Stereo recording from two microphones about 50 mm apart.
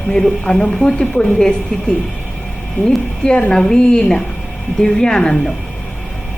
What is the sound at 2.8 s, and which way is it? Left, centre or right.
Speech, left.